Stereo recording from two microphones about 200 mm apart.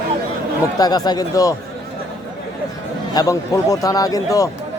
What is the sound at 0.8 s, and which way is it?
Speech, 20° left (ahead or behind).